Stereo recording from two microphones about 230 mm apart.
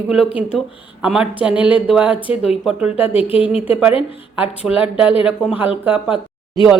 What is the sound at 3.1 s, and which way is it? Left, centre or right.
Speech, left.